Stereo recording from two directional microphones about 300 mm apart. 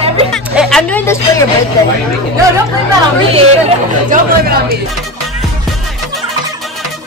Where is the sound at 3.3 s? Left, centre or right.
Right.